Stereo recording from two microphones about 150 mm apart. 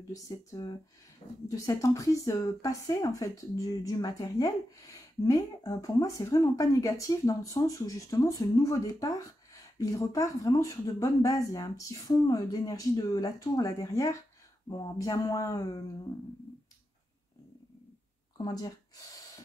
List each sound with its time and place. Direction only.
0.1 s speech: 25° left (ahead or behind)
18.4 s speech: 25° left (ahead or behind)